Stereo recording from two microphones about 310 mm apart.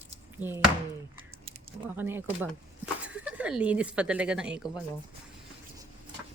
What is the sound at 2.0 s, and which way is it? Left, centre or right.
Speech, centre.